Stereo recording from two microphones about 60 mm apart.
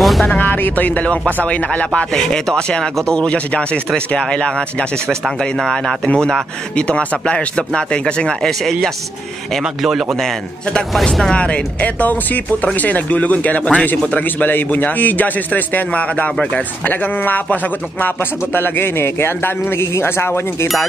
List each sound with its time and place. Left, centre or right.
0.0 s music: centre
0.3 s speech: left
2.0 s a man's voice: centre
9.6 s a man's voice: centre
11.3 s a man's voice: left